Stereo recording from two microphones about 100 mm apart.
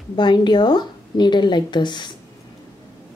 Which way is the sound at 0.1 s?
50° left (ahead or behind).